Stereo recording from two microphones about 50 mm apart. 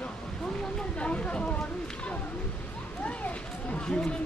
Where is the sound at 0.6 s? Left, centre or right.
Centre.